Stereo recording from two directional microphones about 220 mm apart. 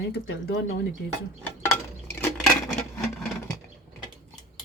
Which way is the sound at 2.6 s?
10° left (ahead or behind).